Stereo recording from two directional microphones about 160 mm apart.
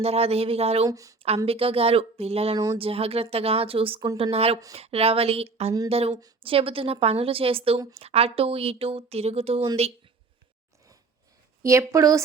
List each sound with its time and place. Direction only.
0.0 s speech: 40° right (ahead or behind)
0.9 s a woman's voice: 20° right (ahead or behind)
1.5 s speech: 35° right (ahead or behind)
11.6 s a woman's voice: 20° right (ahead or behind)